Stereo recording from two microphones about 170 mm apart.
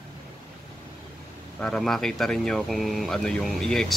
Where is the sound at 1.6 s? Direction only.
Centre (ahead or behind).